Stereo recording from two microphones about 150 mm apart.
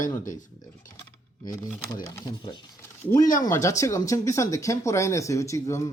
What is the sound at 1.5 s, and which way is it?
Speech, 20° left (ahead or behind).